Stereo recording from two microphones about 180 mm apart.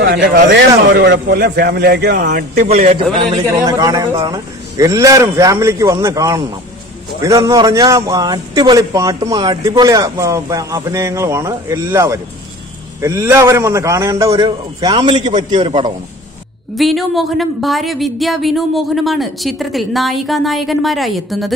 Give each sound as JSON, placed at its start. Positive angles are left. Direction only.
{"t": 0.0, "sound": "a man's voice", "side_deg": -65}
{"t": 2.7, "sound": "a man's voice", "side_deg": -35}
{"t": 3.4, "sound": "a man's voice", "side_deg": -20}
{"t": 16.7, "sound": "a woman's voice", "side_deg": 0}